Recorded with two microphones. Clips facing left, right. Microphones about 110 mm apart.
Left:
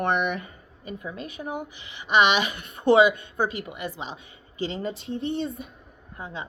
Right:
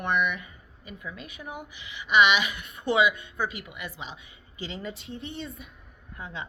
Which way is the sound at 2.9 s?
30° left (ahead or behind).